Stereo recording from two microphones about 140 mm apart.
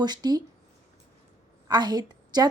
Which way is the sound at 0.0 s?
30° right (ahead or behind).